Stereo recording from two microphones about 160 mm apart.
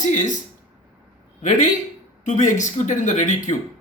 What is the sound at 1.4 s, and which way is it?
A man's voice, 50° left (ahead or behind).